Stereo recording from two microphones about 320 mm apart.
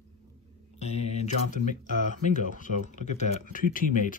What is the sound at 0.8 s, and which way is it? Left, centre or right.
Speech, centre.